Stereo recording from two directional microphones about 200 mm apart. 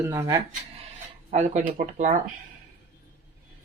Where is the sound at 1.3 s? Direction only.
35° right (ahead or behind).